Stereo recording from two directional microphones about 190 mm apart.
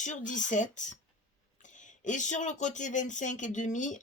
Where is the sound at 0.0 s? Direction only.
40° left (ahead or behind).